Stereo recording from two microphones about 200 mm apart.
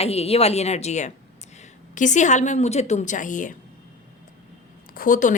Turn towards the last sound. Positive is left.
turn(degrees=40)  # may be behind; listen again after turning